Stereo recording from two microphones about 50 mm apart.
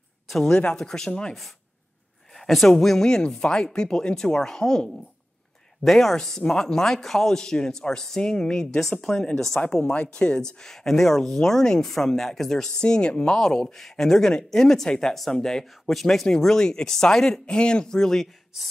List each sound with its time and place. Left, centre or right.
0.5 s speech: centre
2.3 s speech: centre